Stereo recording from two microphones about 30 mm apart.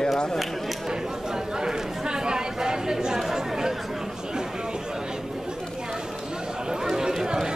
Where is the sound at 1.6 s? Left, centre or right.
Right.